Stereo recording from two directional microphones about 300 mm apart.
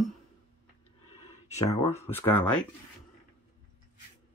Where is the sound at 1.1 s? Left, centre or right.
Centre.